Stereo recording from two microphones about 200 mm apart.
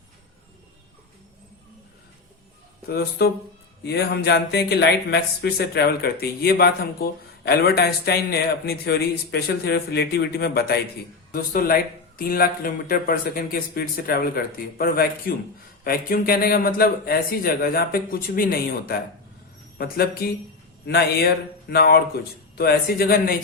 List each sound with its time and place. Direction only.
2.9 s speech: 50° left (ahead or behind)